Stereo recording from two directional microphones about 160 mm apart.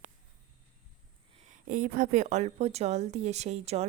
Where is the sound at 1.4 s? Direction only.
55° right (ahead or behind).